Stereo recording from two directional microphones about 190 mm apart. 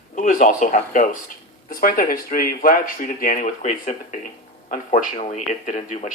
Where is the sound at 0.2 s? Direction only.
45° left (ahead or behind).